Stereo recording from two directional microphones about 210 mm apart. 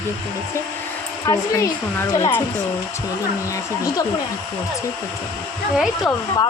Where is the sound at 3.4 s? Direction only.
15° left (ahead or behind).